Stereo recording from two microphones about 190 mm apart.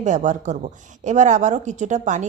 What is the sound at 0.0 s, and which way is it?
Speech, 40° right (ahead or behind).